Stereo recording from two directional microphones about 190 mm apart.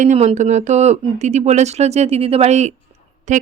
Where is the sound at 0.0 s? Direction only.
35° right (ahead or behind).